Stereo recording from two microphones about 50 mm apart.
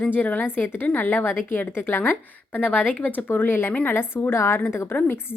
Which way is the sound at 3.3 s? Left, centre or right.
Left.